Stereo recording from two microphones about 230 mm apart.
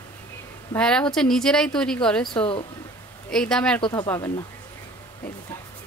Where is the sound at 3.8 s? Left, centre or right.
Centre.